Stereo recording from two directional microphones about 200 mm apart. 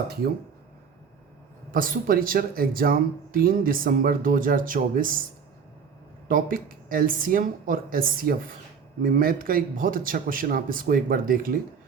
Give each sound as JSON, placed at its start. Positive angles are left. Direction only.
{"t": 1.7, "sound": "speech", "side_deg": -45}
{"t": 6.2, "sound": "speech", "side_deg": -45}